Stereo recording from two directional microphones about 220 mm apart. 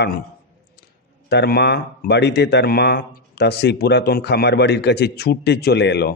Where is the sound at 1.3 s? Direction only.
45° left (ahead or behind).